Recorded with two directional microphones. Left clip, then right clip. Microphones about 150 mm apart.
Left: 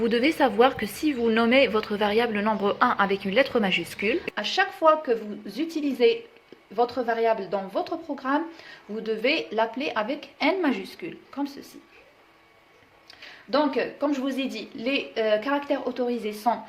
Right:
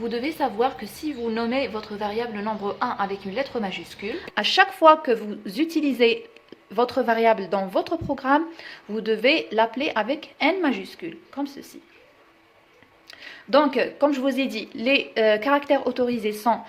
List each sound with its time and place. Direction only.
0.0 s a woman's voice: 20° left (ahead or behind)
4.4 s a woman's voice: 35° right (ahead or behind); by 11.6 s 10° right (ahead or behind)
13.5 s a woman's voice: 40° right (ahead or behind)